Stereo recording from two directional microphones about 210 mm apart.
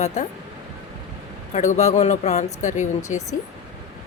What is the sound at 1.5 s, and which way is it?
Speech, 35° left (ahead or behind).